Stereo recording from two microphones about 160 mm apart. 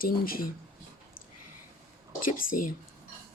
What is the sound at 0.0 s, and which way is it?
Speech, 65° left (ahead or behind).